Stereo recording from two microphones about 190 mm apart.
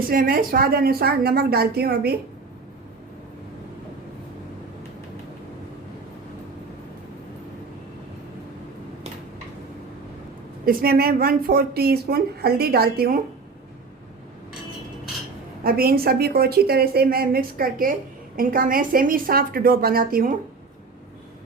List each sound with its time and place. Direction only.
0.1 s a woman's voice: 50° right (ahead or behind)
10.7 s a woman's voice: 50° right (ahead or behind)
15.6 s a woman's voice: 50° right (ahead or behind)